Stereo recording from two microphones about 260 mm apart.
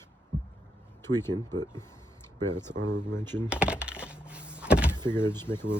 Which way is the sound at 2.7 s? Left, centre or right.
Right.